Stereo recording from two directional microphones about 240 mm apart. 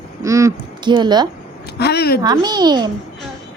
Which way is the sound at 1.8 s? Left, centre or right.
Left.